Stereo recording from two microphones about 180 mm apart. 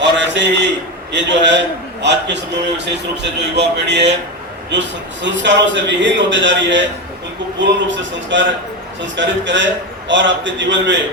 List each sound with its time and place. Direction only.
0.0 s a sound: 75° right (ahead or behind)
1.1 s a man's voice: 80° right
4.7 s a man's voice: 85° right